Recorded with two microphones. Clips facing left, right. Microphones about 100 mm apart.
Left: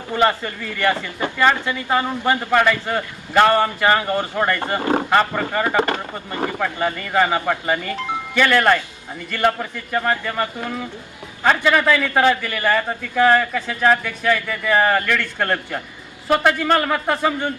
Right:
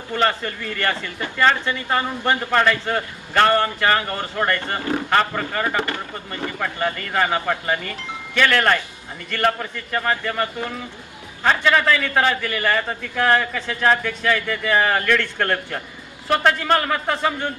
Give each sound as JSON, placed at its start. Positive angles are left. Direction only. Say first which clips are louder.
{"t": 0.1, "sound": "speech", "louder": "left 3 dB", "side_deg": 10}
{"t": 5.6, "sound": "speech", "louder": "left 4 dB", "side_deg": 25}
{"t": 6.6, "sound": "speech", "louder": "right 1 dB", "side_deg": 10}
{"t": 11.4, "sound": "speech", "louder": "left 1 dB", "side_deg": 10}